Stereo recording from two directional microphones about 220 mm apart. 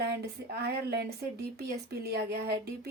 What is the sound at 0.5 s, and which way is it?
A woman's voice, 45° right (ahead or behind).